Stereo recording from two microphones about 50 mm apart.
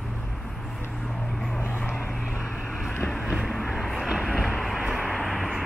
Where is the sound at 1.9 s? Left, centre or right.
Left.